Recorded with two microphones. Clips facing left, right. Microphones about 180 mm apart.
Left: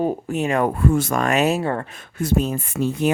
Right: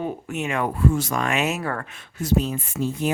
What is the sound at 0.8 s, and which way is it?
Speech, 55° left (ahead or behind).